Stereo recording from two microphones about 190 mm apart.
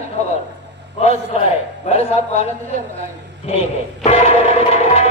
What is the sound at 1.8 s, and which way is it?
Speech, 35° left (ahead or behind).